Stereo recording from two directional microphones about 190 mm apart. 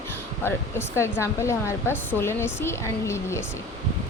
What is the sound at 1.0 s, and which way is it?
Speech, 15° left (ahead or behind).